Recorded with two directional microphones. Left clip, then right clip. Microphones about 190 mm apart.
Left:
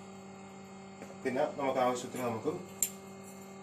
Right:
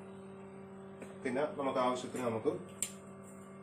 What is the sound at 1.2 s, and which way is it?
Speech, 20° right (ahead or behind).